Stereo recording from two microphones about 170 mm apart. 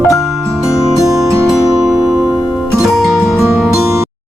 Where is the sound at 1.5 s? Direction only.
5° right (ahead or behind).